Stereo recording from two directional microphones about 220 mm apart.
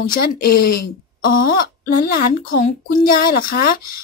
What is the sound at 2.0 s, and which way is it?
A woman's voice, 45° left (ahead or behind).